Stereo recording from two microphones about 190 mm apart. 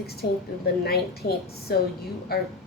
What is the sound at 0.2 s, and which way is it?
A woman's voice, 55° left (ahead or behind).